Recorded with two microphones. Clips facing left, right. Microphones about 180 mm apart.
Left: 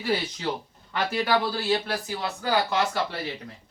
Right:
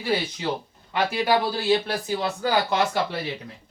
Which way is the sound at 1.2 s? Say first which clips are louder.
Right 2 dB; 15° right (ahead or behind).